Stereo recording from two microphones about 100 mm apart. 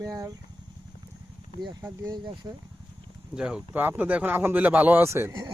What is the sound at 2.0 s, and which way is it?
Speech, 45° right (ahead or behind).